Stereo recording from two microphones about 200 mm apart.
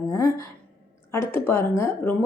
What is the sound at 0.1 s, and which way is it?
Speech, 15° left (ahead or behind).